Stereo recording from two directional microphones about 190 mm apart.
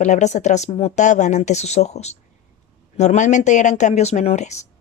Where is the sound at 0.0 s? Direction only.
40° left (ahead or behind).